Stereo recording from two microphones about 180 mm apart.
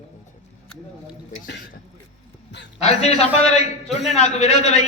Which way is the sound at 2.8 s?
35° left (ahead or behind).